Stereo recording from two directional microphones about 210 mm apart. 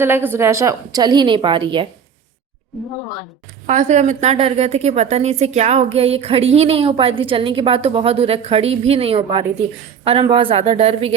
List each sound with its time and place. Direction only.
0.0 s a woman's voice: 10° right (ahead or behind)
3.7 s a woman's voice: 35° right (ahead or behind)